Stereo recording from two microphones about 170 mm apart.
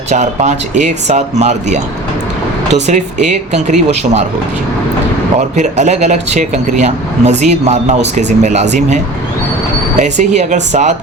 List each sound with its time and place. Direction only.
0.1 s speech: 45° right (ahead or behind)
5.4 s speech: 45° right (ahead or behind)
10.0 s speech: 45° right (ahead or behind)